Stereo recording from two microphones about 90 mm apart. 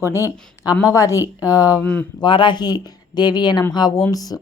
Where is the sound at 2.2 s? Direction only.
60° left (ahead or behind).